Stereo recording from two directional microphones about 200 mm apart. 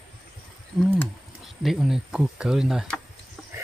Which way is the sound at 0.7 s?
5° left (ahead or behind).